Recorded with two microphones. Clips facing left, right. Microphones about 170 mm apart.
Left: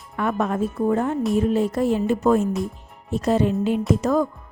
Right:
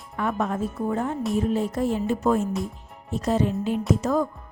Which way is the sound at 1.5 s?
75° left (ahead or behind).